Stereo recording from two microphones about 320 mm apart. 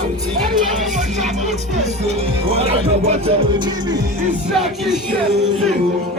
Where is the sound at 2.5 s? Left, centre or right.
Centre.